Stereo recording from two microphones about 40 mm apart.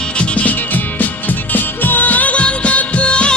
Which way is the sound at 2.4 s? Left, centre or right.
Left.